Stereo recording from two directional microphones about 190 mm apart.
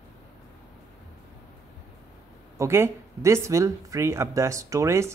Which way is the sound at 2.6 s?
15° right (ahead or behind).